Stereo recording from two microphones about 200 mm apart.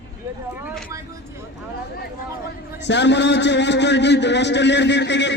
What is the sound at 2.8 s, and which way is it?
A man's voice, 60° left (ahead or behind).